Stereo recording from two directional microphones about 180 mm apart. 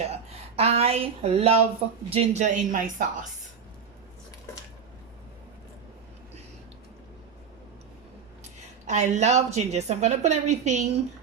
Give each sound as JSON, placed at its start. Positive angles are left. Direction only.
{"t": 0.0, "sound": "a woman's voice", "side_deg": -35}
{"t": 8.9, "sound": "a woman's voice", "side_deg": -40}